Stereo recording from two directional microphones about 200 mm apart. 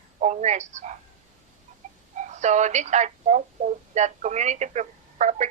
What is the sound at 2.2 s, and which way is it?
Speech, 35° right (ahead or behind).